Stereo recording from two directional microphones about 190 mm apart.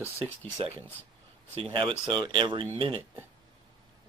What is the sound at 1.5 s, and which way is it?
Speech, 30° right (ahead or behind).